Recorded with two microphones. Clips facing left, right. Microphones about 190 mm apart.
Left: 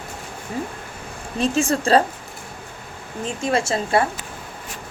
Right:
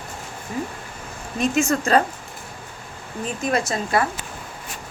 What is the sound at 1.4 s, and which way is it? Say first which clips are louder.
Speech: even; 30° left (ahead or behind).